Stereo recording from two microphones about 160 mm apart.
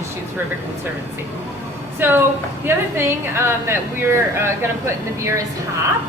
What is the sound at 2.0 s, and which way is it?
A woman's voice, 15° right (ahead or behind).